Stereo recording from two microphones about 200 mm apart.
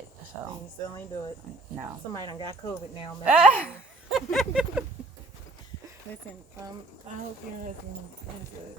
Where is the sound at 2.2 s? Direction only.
20° left (ahead or behind).